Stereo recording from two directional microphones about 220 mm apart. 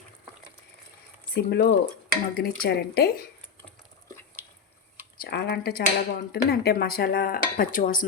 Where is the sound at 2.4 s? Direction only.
45° left (ahead or behind).